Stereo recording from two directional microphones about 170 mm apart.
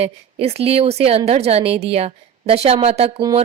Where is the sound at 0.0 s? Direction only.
35° right (ahead or behind).